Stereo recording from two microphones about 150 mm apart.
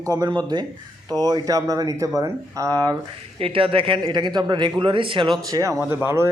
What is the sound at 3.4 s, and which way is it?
A man's voice, 40° right (ahead or behind).